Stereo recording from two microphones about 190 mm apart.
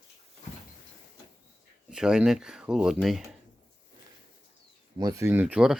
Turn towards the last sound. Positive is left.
turn(degrees=-5)  # may be behind; listen again after turning